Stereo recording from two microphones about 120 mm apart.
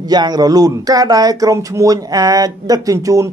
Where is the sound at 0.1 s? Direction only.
35° right (ahead or behind).